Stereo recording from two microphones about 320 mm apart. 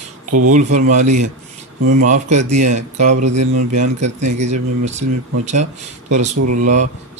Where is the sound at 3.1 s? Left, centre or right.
Right.